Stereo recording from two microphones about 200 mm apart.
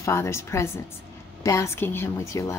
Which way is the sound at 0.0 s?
15° left (ahead or behind).